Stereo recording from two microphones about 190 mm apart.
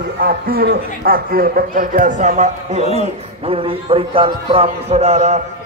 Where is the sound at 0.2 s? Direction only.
55° right (ahead or behind).